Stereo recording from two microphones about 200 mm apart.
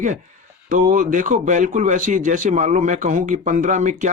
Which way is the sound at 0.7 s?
40° right (ahead or behind).